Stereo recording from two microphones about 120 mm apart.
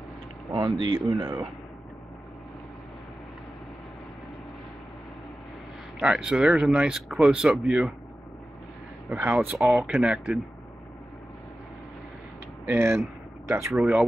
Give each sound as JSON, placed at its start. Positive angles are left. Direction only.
{"t": 0.5, "sound": "speech", "side_deg": -35}
{"t": 5.9, "sound": "speech", "side_deg": -5}
{"t": 9.1, "sound": "speech", "side_deg": -15}
{"t": 9.7, "sound": "speech", "side_deg": 0}
{"t": 12.6, "sound": "speech", "side_deg": -20}
{"t": 13.7, "sound": "speech", "side_deg": -5}